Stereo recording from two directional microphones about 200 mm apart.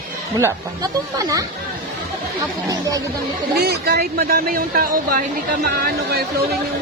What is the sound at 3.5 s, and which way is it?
Speech, 50° right (ahead or behind).